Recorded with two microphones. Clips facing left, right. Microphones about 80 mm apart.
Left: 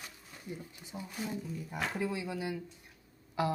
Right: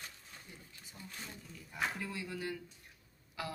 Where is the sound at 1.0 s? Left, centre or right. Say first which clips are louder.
Left 11 dB; centre.